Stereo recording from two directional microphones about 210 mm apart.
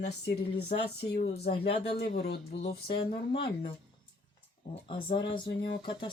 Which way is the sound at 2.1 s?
50° left (ahead or behind).